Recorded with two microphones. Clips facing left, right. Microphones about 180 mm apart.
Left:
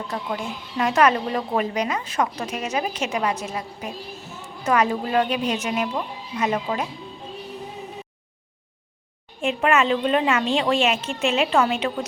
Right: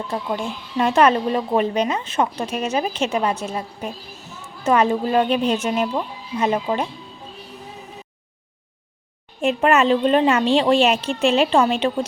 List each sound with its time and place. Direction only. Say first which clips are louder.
0.1 s a woman's voice: right 5 dB; 25° right (ahead or behind)
9.4 s a woman's voice: right 3 dB; 40° right (ahead or behind)